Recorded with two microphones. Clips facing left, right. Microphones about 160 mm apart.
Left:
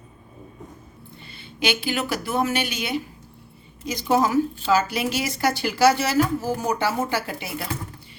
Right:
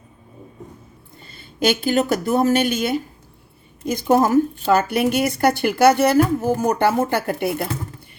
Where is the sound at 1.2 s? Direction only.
45° right (ahead or behind).